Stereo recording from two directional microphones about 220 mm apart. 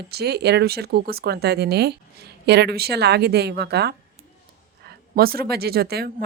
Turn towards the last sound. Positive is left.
turn(degrees=-45)  # may be behind; listen again after turning